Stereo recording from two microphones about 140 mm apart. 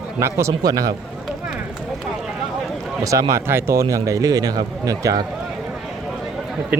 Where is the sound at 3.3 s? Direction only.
20° right (ahead or behind).